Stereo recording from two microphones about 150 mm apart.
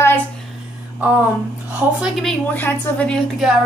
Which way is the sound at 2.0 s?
Centre (ahead or behind).